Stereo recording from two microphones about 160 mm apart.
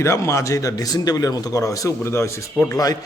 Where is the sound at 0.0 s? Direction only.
20° left (ahead or behind).